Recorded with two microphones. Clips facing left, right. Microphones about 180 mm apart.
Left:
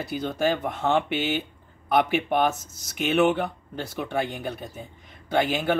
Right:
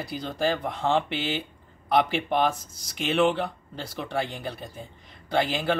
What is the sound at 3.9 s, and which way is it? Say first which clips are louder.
Speech: left 2 dB; 5° left (ahead or behind).